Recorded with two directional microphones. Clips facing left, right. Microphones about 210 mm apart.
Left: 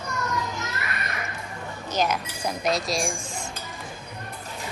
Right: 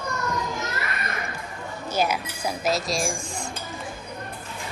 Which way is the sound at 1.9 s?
10° right (ahead or behind).